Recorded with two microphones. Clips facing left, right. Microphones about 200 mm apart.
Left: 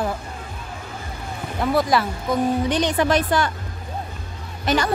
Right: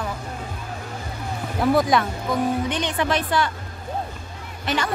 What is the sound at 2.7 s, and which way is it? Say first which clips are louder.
Speech: left 4 dB; 40° left (ahead or behind).